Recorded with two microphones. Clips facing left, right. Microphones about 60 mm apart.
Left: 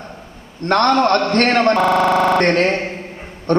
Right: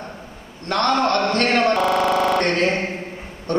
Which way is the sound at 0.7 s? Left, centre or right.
Left.